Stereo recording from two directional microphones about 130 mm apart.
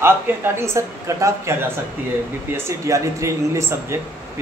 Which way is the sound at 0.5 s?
20° right (ahead or behind).